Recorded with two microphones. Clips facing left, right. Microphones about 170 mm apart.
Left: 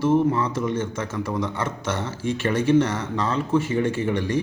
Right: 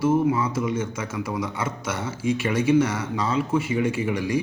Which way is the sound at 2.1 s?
40° left (ahead or behind).